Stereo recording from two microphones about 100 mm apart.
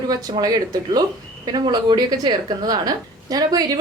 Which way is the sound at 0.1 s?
40° right (ahead or behind).